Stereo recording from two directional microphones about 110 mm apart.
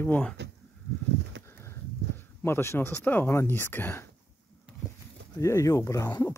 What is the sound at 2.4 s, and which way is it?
Speech, 25° left (ahead or behind).